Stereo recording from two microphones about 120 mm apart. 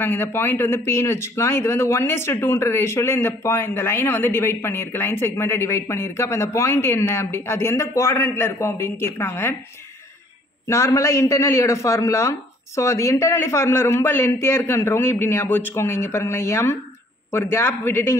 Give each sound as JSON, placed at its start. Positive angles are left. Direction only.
{"t": 0.0, "sound": "speech", "side_deg": 15}
{"t": 10.7, "sound": "speech", "side_deg": 25}